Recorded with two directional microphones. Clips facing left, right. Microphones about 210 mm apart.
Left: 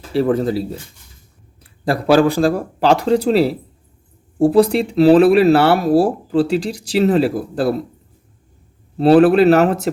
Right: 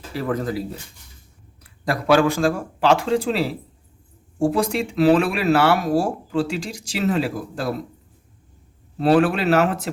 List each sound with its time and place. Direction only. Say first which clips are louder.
0.1 s speech: left 8 dB; 30° left (ahead or behind)
1.8 s speech: left 4 dB; 30° left (ahead or behind)
9.0 s speech: left 7 dB; 35° left (ahead or behind)